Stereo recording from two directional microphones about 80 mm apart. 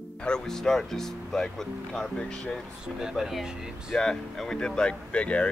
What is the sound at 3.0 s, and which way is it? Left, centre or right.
Speech, centre.